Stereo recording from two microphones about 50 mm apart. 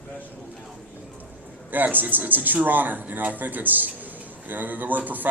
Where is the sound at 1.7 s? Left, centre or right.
Right.